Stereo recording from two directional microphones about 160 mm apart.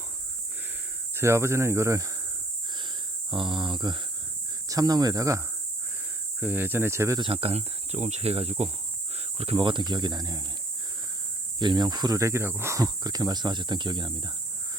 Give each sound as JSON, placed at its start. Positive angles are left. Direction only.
{"t": 1.1, "sound": "speech", "side_deg": -15}
{"t": 3.3, "sound": "speech", "side_deg": -30}
{"t": 6.4, "sound": "speech", "side_deg": -10}
{"t": 7.2, "sound": "speech", "side_deg": -35}
{"t": 11.6, "sound": "speech", "side_deg": -30}